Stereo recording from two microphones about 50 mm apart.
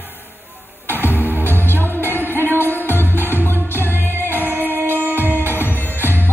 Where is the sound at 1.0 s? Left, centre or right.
Left.